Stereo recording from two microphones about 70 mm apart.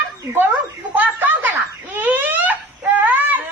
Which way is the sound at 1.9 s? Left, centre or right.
Right.